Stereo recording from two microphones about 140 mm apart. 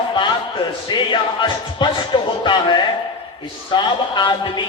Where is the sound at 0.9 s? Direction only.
35° left (ahead or behind).